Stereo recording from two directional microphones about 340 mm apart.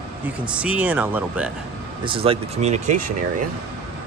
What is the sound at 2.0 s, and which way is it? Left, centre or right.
Speech, centre.